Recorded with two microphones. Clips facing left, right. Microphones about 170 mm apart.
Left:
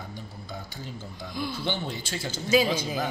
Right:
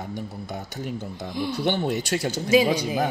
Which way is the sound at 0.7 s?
70° right (ahead or behind).